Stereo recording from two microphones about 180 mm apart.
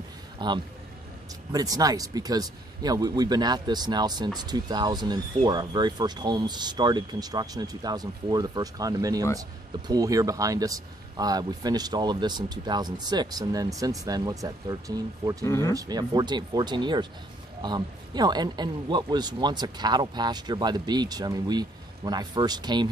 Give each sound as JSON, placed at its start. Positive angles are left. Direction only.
{"t": 0.4, "sound": "speech", "side_deg": -25}
{"t": 15.4, "sound": "speech", "side_deg": 15}
{"t": 15.7, "sound": "speech", "side_deg": -20}